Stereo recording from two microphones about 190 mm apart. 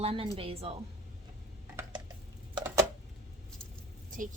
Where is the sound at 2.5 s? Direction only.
15° right (ahead or behind).